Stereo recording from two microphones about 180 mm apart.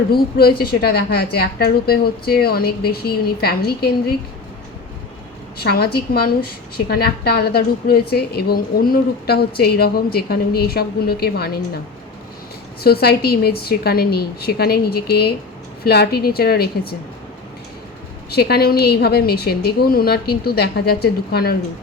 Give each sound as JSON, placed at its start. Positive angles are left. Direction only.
{"t": 0.1, "sound": "a woman's voice", "side_deg": 60}
{"t": 5.5, "sound": "a woman's voice", "side_deg": 60}
{"t": 12.8, "sound": "a woman's voice", "side_deg": 60}
{"t": 18.3, "sound": "a woman's voice", "side_deg": 60}